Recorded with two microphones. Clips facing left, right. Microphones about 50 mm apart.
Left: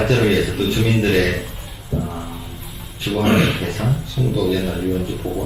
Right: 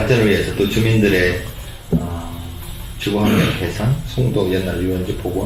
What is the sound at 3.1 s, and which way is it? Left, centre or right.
Speech, centre.